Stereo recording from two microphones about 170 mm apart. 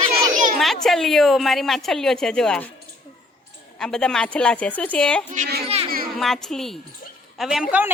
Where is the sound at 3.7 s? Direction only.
5° left (ahead or behind).